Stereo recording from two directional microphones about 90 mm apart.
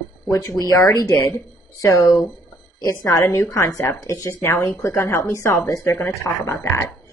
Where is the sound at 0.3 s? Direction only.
35° left (ahead or behind).